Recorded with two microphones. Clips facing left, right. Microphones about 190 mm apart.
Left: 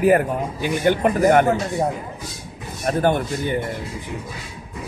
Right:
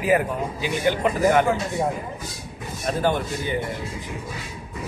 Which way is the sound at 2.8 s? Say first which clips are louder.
Left 4 dB; 55° left (ahead or behind).